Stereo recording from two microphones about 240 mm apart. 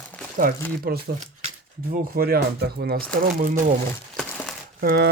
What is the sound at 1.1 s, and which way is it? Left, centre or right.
Speech, right.